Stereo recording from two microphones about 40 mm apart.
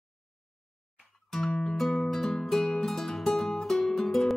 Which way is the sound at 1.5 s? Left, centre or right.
Centre.